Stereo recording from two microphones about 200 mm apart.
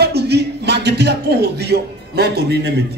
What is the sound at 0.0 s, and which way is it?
Speech, 55° right (ahead or behind).